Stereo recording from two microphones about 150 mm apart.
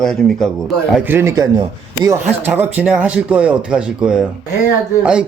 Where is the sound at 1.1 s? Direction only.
20° right (ahead or behind).